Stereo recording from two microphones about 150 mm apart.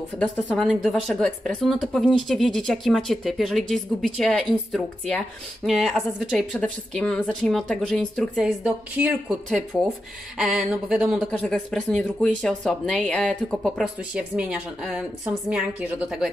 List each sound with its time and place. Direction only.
0.2 s speech: 5° left (ahead or behind)
8.4 s a woman's voice: 10° right (ahead or behind)
9.7 s speech: 5° left (ahead or behind)
13.9 s a woman's voice: 10° right (ahead or behind)